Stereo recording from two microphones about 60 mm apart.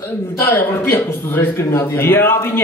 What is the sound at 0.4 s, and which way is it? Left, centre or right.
A woman's voice, left.